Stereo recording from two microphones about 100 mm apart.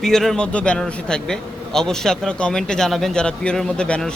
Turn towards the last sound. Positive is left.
turn(degrees=10)  # may be behind; listen again after turning